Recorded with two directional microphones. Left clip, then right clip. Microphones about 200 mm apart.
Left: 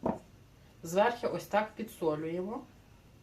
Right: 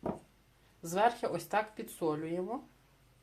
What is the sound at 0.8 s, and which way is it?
Speech, 60° right (ahead or behind).